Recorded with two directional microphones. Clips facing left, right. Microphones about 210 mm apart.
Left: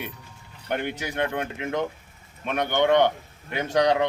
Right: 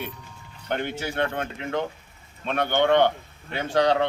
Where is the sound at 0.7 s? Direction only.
10° left (ahead or behind).